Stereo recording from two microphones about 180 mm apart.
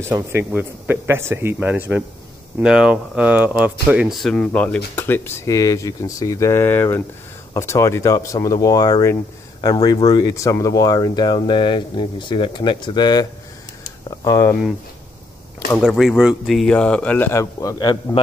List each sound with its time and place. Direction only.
0.0 s speech: 15° right (ahead or behind); by 14.5 s 20° left (ahead or behind)
15.8 s speech: centre (ahead or behind); by 18.2 s 25° left (ahead or behind)